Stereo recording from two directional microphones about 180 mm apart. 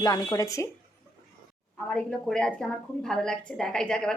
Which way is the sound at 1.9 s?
5° left (ahead or behind).